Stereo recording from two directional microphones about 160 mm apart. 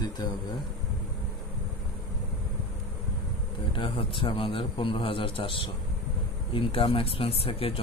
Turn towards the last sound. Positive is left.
turn(degrees=35)  # may be behind; listen again after turning